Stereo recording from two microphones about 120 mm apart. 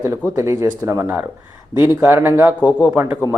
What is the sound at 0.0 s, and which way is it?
A man's voice, 20° right (ahead or behind).